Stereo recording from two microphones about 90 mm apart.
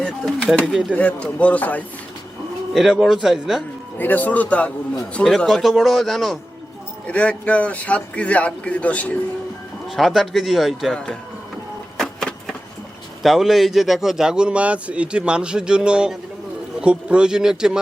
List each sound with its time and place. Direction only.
0.6 s a man's voice: centre (ahead or behind)
0.9 s speech: 15° left (ahead or behind)
2.7 s a man's voice: 5° right (ahead or behind)
3.9 s speech: 20° left (ahead or behind)
4.9 s a man's voice: 5° left (ahead or behind)
7.1 s speech: 15° left (ahead or behind)
9.9 s a man's voice: centre (ahead or behind)
11.9 s printer: 5° left (ahead or behind)
13.2 s speech: centre (ahead or behind)